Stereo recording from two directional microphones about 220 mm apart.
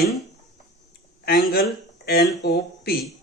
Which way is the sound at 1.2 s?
45° left (ahead or behind).